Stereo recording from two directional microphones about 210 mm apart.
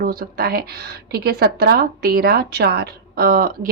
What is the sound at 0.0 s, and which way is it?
Speech, 45° right (ahead or behind).